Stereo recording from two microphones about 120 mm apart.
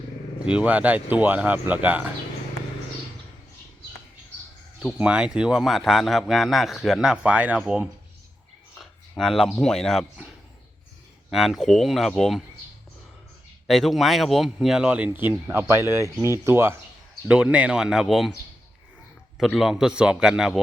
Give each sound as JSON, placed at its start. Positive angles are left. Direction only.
{"t": 0.4, "sound": "speech", "side_deg": -10}
{"t": 4.9, "sound": "a man's voice", "side_deg": -10}
{"t": 11.3, "sound": "a man's voice", "side_deg": 0}
{"t": 13.7, "sound": "speech", "side_deg": 0}
{"t": 17.2, "sound": "speech", "side_deg": -10}
{"t": 19.4, "sound": "a man's voice", "side_deg": 0}